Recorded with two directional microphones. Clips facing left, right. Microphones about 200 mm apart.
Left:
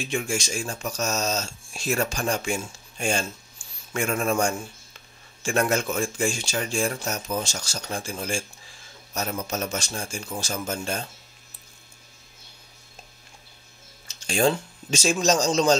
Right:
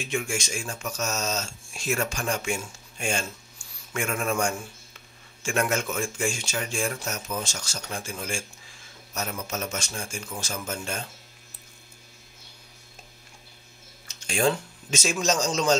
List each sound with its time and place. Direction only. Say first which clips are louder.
0.1 s speech: left 1 dB; 35° left (ahead or behind)
14.0 s speech: left 2 dB; 30° left (ahead or behind)